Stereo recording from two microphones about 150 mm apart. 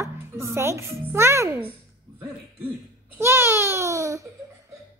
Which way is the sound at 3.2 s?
15° right (ahead or behind).